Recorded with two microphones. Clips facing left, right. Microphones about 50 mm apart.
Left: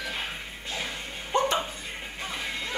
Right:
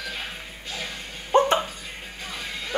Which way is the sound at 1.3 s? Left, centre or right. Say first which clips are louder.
Right 6 dB; right.